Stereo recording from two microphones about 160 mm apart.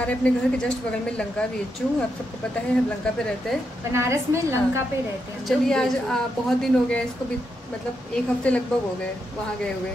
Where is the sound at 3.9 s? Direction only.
15° right (ahead or behind).